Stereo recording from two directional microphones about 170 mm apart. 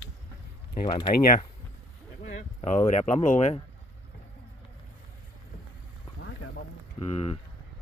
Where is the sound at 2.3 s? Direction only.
45° left (ahead or behind).